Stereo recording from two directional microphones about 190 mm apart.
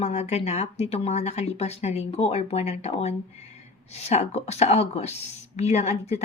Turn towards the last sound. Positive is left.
turn(degrees=35)  # may be behind; listen again after turning